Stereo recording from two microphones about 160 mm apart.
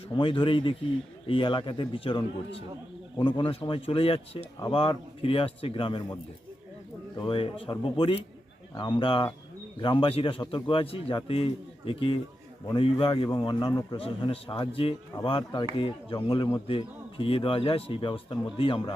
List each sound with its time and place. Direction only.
0.1 s a man's voice: 30° left (ahead or behind)
7.2 s a man's voice: 35° left (ahead or behind)